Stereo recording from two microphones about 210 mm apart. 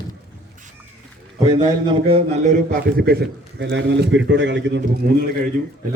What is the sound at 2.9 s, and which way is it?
A man's voice, 50° right (ahead or behind).